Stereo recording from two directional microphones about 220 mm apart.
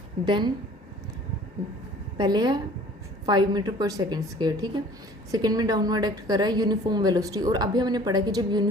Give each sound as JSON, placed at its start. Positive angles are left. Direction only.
{"t": 0.3, "sound": "a woman's voice", "side_deg": -20}
{"t": 2.1, "sound": "a woman's voice", "side_deg": -20}